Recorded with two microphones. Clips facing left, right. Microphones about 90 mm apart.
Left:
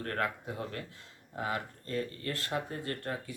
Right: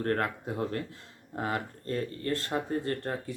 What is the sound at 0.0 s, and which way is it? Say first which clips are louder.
Speech: right 5 dB; 40° right (ahead or behind).